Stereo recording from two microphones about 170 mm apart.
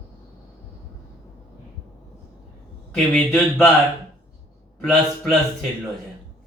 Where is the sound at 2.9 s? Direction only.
Centre (ahead or behind).